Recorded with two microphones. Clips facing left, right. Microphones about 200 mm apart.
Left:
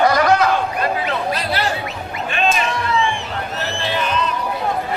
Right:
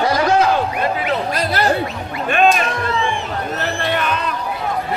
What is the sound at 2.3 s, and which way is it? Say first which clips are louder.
Cat: right 5 dB; 50° right (ahead or behind).